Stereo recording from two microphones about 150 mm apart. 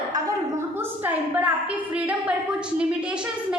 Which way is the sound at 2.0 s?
10° right (ahead or behind).